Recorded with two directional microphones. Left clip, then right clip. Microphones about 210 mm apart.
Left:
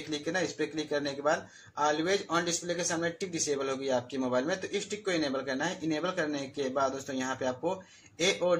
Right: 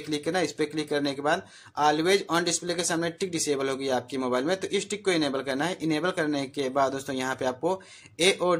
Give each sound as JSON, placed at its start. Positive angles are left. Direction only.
{"t": 0.1, "sound": "speech", "side_deg": -35}